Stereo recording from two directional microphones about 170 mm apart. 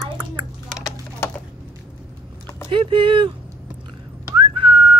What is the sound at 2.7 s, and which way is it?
Speech, 30° right (ahead or behind).